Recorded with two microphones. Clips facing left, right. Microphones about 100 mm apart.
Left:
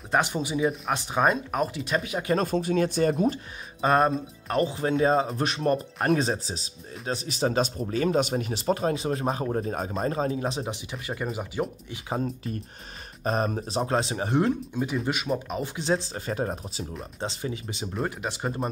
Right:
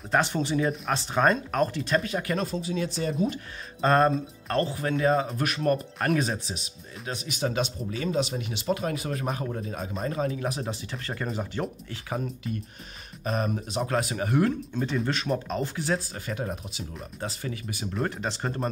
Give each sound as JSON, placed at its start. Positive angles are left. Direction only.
{"t": 0.1, "sound": "speech", "side_deg": 15}
{"t": 2.3, "sound": "speech", "side_deg": 50}
{"t": 3.8, "sound": "speech", "side_deg": 15}
{"t": 4.7, "sound": "speech", "side_deg": 25}
{"t": 9.5, "sound": "speech", "side_deg": 40}
{"t": 13.2, "sound": "speech", "side_deg": 35}
{"t": 14.7, "sound": "speech", "side_deg": 10}
{"t": 17.2, "sound": "speech", "side_deg": 20}
{"t": 17.9, "sound": "speech", "side_deg": 5}